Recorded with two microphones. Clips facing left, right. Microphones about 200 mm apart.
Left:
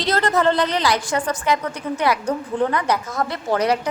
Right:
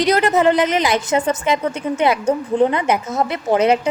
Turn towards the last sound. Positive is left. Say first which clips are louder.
# right 4 dB
turn(degrees=-25)  # may be behind; listen again after turning